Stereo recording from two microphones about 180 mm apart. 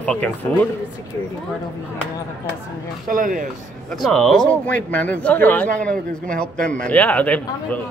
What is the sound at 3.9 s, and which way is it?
Speech, centre (ahead or behind).